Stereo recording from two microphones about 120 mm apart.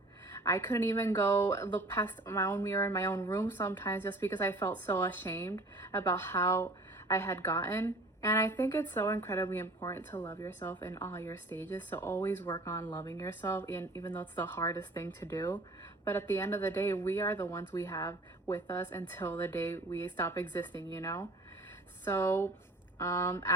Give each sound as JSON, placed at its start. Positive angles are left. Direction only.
{"t": 0.3, "sound": "a sound", "side_deg": 25}
{"t": 0.7, "sound": "a woman's voice", "side_deg": 15}
{"t": 12.8, "sound": "speech", "side_deg": 40}
{"t": 13.4, "sound": "a woman's voice", "side_deg": 15}
{"t": 15.4, "sound": "speech", "side_deg": 35}
{"t": 16.0, "sound": "a woman's voice", "side_deg": 20}
{"t": 20.9, "sound": "speech", "side_deg": 35}
{"t": 22.0, "sound": "a woman's voice", "side_deg": 20}